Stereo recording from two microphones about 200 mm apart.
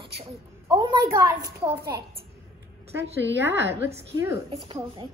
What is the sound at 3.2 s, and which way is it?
Speech, 65° right (ahead or behind).